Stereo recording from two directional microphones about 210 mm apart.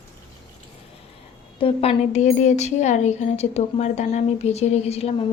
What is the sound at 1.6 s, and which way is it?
A woman's voice, 30° left (ahead or behind).